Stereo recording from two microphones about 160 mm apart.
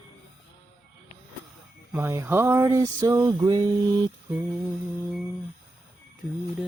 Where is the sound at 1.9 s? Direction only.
15° right (ahead or behind).